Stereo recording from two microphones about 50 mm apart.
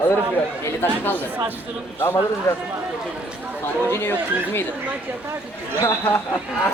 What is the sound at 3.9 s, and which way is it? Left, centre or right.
Speech, left.